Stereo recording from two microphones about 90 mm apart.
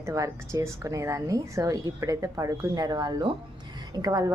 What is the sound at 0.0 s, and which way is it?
A woman's voice, 40° right (ahead or behind).